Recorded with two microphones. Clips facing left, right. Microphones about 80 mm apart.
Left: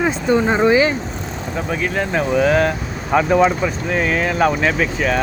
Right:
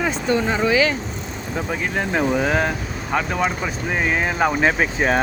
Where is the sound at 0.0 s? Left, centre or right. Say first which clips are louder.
Left 4 dB; centre.